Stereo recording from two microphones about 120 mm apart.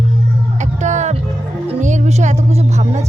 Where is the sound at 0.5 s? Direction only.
80° right.